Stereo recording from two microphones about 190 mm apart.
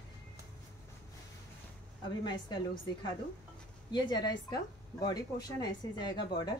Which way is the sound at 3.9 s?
20° left (ahead or behind).